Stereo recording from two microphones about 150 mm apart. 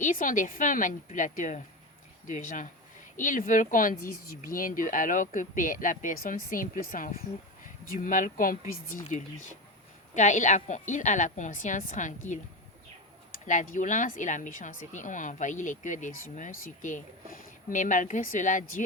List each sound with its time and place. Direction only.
0.0 s speech: 60° left (ahead or behind)
13.5 s speech: 55° left (ahead or behind)